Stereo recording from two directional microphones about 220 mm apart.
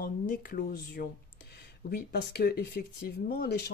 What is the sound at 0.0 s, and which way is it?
Speech, 45° left (ahead or behind).